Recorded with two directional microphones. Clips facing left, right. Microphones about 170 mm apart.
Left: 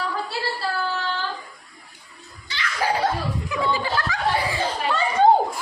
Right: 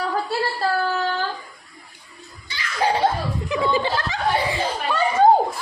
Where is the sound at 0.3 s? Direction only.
50° right (ahead or behind).